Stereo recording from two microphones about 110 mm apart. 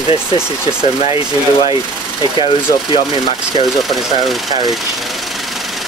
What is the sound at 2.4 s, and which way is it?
Speech, 45° left (ahead or behind).